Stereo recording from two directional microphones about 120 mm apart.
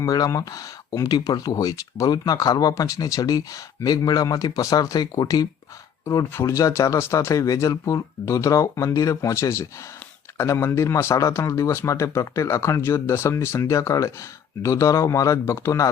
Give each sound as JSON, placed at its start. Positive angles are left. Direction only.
{"t": 0.0, "sound": "speech", "side_deg": 30}